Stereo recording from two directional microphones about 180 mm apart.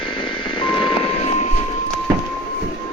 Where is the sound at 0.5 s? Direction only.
30° left (ahead or behind).